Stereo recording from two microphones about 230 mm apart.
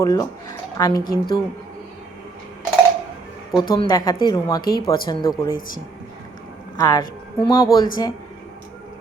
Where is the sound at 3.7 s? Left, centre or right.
Centre.